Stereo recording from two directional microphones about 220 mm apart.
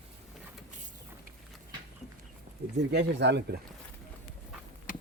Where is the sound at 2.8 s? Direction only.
50° right (ahead or behind).